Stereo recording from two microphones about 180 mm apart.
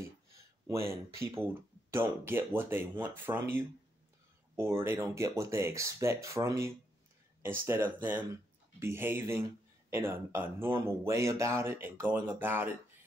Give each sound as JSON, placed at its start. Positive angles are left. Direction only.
{"t": 0.7, "sound": "speech", "side_deg": -15}